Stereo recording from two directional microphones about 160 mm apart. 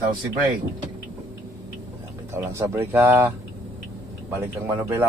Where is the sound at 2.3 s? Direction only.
15° right (ahead or behind).